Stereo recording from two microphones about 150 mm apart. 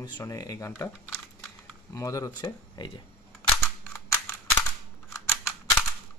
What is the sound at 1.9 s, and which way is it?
A man's voice, 20° left (ahead or behind).